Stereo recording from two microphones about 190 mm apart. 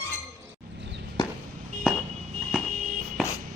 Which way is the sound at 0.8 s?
70° right (ahead or behind).